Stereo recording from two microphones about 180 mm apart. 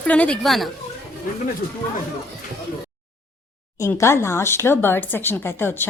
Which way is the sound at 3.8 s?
15° left (ahead or behind).